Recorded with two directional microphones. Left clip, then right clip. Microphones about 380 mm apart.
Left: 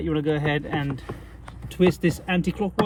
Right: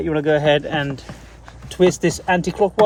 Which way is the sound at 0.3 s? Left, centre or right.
Centre.